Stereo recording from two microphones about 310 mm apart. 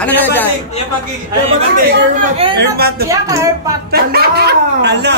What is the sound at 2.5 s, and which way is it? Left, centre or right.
Speech, right.